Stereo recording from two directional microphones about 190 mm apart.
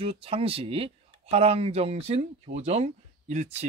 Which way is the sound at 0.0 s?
30° right (ahead or behind).